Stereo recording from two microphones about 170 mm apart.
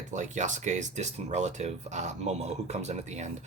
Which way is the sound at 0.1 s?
45° right (ahead or behind).